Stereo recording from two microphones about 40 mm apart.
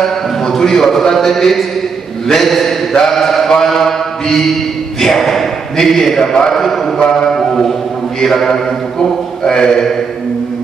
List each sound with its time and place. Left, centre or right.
0.0 s a man's voice: centre
2.2 s mantra: centre
5.0 s a man's voice: centre
6.5 s mantra: centre